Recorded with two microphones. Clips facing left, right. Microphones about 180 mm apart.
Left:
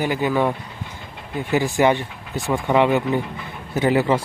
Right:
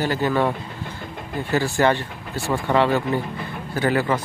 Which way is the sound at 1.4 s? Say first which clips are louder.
Left 2 dB; 15° left (ahead or behind).